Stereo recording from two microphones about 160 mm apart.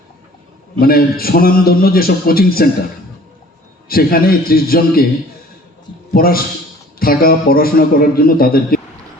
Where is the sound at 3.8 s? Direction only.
65° left (ahead or behind).